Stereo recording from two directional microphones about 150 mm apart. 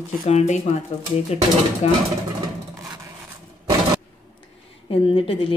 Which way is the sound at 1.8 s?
45° left (ahead or behind).